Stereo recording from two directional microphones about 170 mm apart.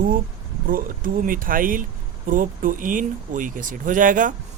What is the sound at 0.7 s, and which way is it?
Speech, 55° right (ahead or behind).